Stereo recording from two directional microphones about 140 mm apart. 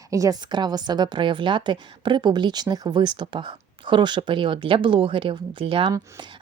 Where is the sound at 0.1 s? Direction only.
25° right (ahead or behind).